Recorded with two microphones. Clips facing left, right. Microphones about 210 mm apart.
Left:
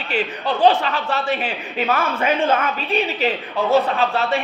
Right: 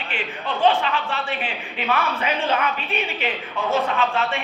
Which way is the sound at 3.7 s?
35° left (ahead or behind).